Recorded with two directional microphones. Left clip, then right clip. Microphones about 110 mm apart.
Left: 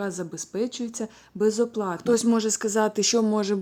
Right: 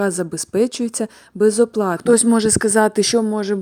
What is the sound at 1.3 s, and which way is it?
Speech, 50° right (ahead or behind).